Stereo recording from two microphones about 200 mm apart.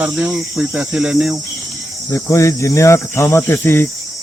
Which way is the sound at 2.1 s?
15° left (ahead or behind).